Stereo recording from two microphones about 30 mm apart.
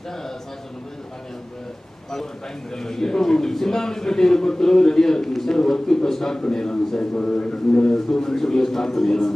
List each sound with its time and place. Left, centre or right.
2.7 s a man's voice: centre
7.0 s a man's voice: left
7.8 s a man's voice: centre